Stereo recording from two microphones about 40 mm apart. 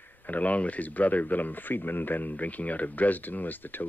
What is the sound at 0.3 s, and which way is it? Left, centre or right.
Speech, left.